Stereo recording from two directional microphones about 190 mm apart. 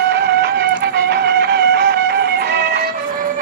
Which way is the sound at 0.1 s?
60° right (ahead or behind).